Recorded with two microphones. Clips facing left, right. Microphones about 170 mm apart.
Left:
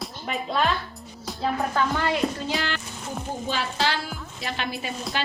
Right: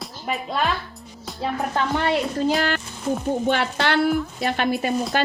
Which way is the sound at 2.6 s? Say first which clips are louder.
Right 6 dB; 50° right (ahead or behind).